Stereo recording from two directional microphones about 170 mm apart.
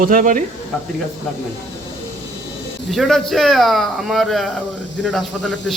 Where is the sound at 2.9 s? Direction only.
Centre (ahead or behind).